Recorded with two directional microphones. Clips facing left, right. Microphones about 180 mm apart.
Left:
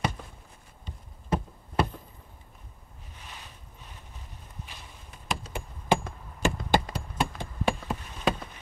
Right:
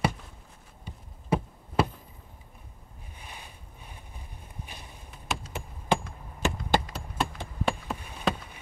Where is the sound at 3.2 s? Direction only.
10° right (ahead or behind).